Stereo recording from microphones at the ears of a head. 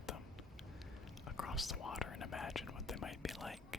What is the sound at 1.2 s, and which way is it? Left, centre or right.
Speech, left.